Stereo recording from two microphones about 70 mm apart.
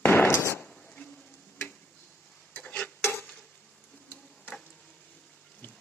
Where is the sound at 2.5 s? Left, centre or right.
Centre.